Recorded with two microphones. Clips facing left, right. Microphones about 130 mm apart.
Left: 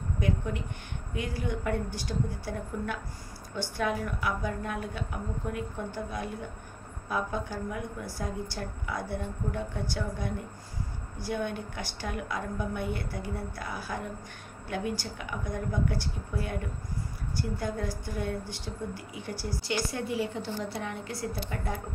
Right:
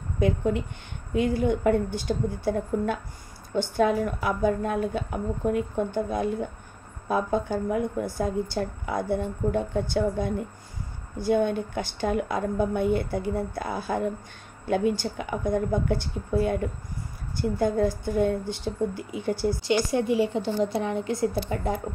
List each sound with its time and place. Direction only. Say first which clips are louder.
0.2 s a woman's voice: right 8 dB; 25° right (ahead or behind)